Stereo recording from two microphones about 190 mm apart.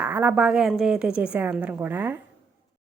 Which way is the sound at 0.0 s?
10° right (ahead or behind).